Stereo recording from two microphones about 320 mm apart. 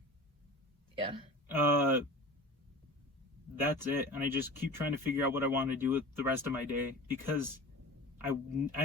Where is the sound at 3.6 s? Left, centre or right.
Centre.